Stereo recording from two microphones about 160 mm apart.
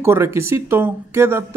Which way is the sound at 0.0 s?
15° right (ahead or behind).